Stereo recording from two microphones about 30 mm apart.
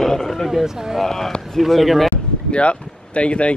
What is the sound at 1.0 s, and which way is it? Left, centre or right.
A man's voice, centre.